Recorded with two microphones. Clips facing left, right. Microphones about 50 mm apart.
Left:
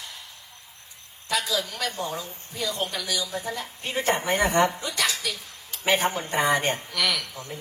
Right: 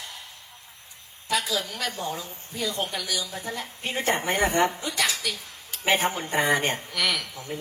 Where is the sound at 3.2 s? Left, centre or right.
Left.